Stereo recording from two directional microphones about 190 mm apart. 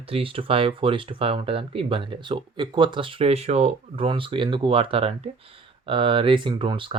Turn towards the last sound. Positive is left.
turn(degrees=-25)  # may be behind; listen again after turning